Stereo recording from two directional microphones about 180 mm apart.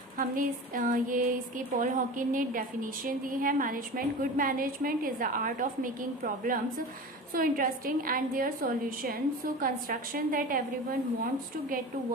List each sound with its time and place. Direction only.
0.2 s a woman's voice: 50° right (ahead or behind)